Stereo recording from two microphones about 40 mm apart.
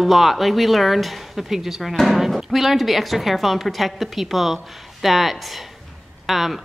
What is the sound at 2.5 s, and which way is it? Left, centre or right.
A woman's voice, centre.